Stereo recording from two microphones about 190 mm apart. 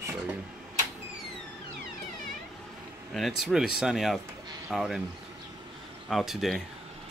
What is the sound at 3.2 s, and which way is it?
Speech, centre (ahead or behind).